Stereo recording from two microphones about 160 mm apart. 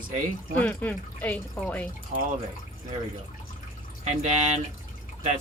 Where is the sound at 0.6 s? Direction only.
10° left (ahead or behind).